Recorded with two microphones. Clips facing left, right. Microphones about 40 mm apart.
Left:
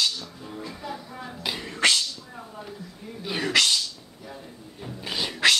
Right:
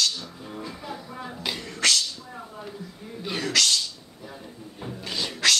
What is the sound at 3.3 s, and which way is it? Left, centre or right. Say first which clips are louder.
Sneeze: left 1 dB; centre.